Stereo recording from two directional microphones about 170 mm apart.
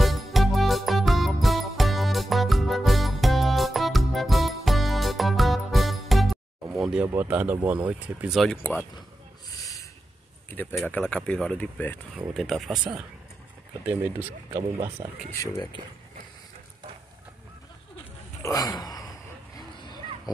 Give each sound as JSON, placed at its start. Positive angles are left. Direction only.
{"t": 0.0, "sound": "music", "side_deg": 0}
{"t": 7.1, "sound": "speech", "side_deg": -10}
{"t": 9.6, "sound": "a sound", "side_deg": 20}
{"t": 10.5, "sound": "speech", "side_deg": 15}
{"t": 13.8, "sound": "speech", "side_deg": -10}
{"t": 15.4, "sound": "speech", "side_deg": 25}
{"t": 18.4, "sound": "a sound", "side_deg": 20}